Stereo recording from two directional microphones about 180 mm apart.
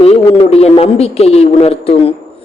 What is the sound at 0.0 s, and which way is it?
A man's voice, 35° left (ahead or behind).